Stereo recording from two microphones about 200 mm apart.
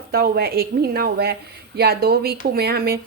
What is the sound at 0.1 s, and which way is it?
Speech, 50° right (ahead or behind).